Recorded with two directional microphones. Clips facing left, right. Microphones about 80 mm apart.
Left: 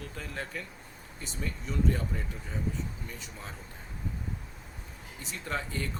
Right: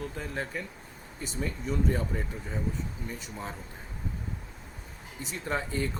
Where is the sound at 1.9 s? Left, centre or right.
Centre.